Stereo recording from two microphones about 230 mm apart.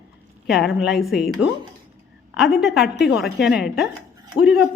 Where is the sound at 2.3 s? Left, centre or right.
Centre.